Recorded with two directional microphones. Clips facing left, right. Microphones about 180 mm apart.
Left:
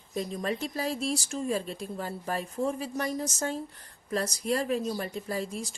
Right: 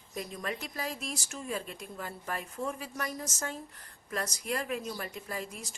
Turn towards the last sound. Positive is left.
turn(degrees=30)  # may be behind; listen again after turning